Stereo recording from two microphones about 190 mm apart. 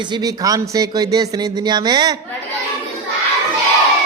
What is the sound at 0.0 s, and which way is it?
Speech, 20° right (ahead or behind).